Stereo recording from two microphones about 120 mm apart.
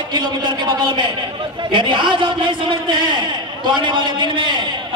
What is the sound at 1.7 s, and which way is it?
A man's voice, 40° right (ahead or behind).